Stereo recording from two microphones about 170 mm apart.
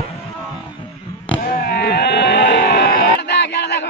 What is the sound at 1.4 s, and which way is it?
Sheep, 60° left (ahead or behind).